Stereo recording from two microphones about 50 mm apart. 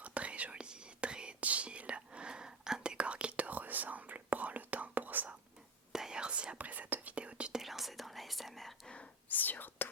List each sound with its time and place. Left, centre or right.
0.0 s whispering: right
5.9 s whispering: centre
7.5 s whispering: centre
9.3 s whispering: left